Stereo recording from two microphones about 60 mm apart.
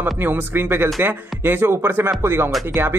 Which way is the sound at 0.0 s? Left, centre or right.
Right.